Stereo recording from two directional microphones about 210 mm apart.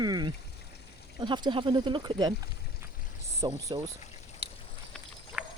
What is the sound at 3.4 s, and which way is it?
Speech, 20° right (ahead or behind).